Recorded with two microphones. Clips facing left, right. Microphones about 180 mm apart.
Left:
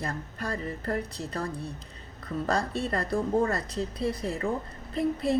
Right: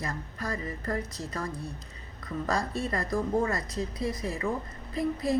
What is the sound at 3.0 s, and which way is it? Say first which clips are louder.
Speech: left 2 dB; 30° left (ahead or behind).